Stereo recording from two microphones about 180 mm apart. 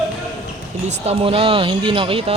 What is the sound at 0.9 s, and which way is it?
Speech, 35° right (ahead or behind).